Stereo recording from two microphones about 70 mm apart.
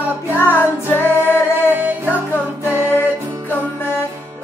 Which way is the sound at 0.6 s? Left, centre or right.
Left.